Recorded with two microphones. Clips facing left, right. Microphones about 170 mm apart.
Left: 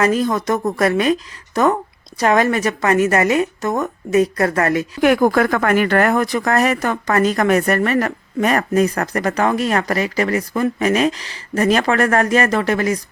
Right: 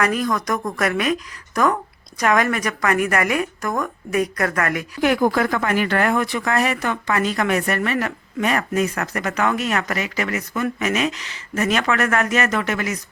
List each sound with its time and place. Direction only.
0.0 s a woman's voice: 30° left (ahead or behind)
4.9 s speech: 50° left (ahead or behind); by 13.0 s 35° left (ahead or behind)